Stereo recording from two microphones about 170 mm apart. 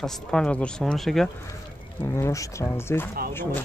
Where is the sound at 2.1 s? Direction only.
15° left (ahead or behind).